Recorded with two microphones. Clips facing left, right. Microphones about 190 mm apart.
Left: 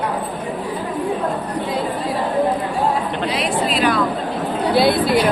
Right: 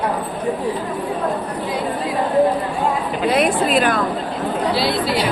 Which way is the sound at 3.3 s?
50° right (ahead or behind).